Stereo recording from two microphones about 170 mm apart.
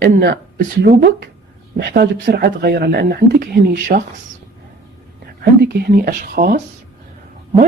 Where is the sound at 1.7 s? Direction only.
70° right (ahead or behind).